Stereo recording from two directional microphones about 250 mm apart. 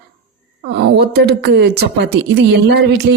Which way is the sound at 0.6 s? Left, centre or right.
Right.